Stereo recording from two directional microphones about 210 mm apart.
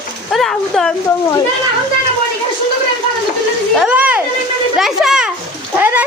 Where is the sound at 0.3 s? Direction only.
Centre (ahead or behind).